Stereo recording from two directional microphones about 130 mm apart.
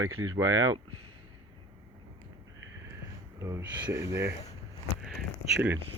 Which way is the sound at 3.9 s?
20° right (ahead or behind).